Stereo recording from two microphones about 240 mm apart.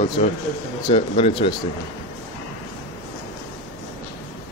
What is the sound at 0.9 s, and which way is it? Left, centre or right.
Speech, left.